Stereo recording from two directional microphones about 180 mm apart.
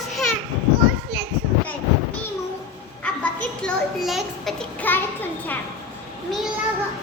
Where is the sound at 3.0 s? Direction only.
5° left (ahead or behind).